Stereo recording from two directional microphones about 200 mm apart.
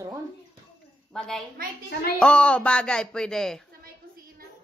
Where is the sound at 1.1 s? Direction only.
5° left (ahead or behind).